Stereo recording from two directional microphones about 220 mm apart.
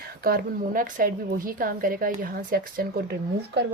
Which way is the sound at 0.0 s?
40° right (ahead or behind).